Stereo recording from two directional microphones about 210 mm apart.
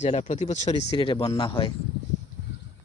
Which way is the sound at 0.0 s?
35° left (ahead or behind).